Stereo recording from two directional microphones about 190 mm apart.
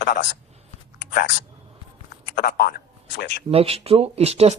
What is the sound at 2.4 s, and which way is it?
Speech, 55° left (ahead or behind).